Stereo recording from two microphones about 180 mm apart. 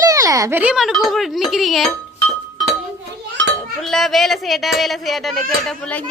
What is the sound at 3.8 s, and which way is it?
Speech, centre (ahead or behind).